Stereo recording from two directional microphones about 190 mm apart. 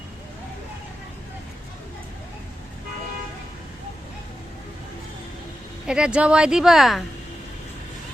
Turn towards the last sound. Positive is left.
turn(degrees=0)  # may be behind; listen again after turning